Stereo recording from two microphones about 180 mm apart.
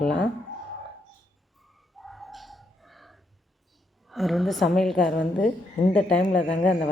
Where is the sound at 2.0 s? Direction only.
Centre (ahead or behind).